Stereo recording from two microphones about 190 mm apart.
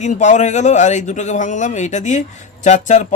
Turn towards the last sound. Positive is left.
turn(degrees=40)  # may be behind; listen again after turning